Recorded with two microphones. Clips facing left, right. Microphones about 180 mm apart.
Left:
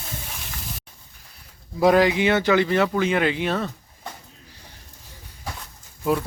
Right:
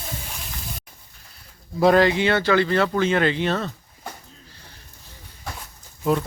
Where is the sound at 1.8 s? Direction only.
10° left (ahead or behind).